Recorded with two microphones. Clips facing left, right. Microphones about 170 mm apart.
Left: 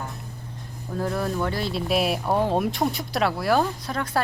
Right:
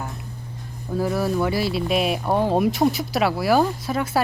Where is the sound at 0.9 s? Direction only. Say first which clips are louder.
Right 4 dB; 5° right (ahead or behind).